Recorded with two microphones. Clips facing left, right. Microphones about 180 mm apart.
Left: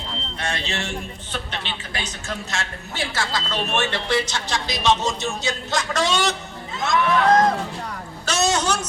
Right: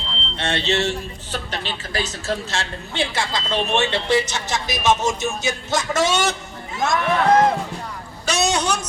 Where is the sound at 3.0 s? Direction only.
20° right (ahead or behind).